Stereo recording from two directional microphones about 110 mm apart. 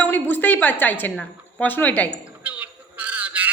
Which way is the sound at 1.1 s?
Centre (ahead or behind).